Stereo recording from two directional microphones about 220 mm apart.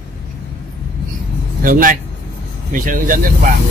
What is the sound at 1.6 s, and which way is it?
Speech, 40° right (ahead or behind).